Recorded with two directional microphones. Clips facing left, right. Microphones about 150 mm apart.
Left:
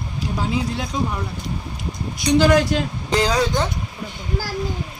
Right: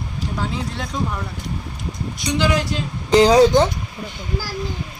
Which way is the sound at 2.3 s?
50° left (ahead or behind).